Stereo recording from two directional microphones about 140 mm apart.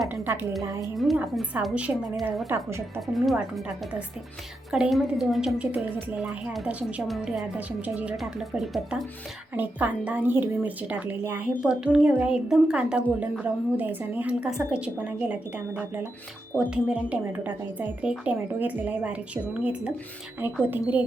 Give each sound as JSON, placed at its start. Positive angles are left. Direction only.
{"t": 0.9, "sound": "a woman's voice", "side_deg": 0}
{"t": 3.1, "sound": "a woman's voice", "side_deg": 0}